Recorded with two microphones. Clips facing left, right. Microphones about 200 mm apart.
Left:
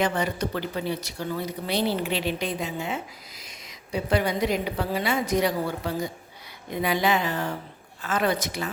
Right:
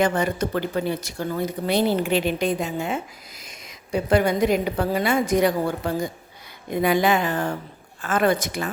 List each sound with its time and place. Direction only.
0.0 s speech: 50° right (ahead or behind)